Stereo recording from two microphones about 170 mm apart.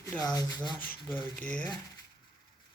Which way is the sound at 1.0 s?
10° left (ahead or behind).